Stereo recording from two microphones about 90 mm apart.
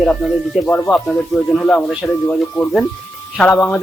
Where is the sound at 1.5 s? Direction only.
10° left (ahead or behind).